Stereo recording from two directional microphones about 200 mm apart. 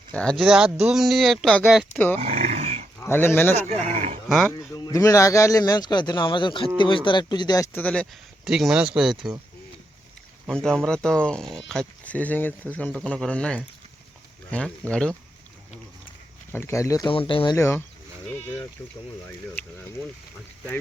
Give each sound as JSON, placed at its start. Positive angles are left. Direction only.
{"t": 0.1, "sound": "speech", "side_deg": 5}
{"t": 2.1, "sound": "grunt", "side_deg": -35}
{"t": 3.0, "sound": "speech", "side_deg": 10}
{"t": 3.7, "sound": "speech", "side_deg": -35}
{"t": 4.5, "sound": "speech", "side_deg": 20}
{"t": 10.4, "sound": "speech", "side_deg": 0}
{"t": 16.5, "sound": "speech", "side_deg": 10}